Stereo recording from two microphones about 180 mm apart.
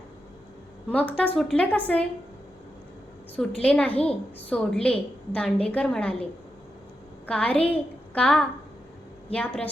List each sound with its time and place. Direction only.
0.9 s a woman's voice: 10° left (ahead or behind)
3.3 s a woman's voice: 5° left (ahead or behind)
7.3 s a woman's voice: 5° left (ahead or behind)